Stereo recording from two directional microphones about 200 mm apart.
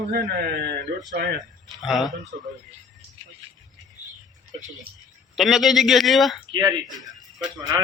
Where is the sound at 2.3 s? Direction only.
55° right (ahead or behind).